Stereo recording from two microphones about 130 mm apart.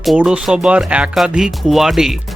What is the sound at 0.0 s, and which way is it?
Speech, 5° right (ahead or behind).